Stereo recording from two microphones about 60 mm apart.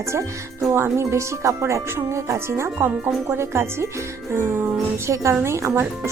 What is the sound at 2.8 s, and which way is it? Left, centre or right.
Speech, right.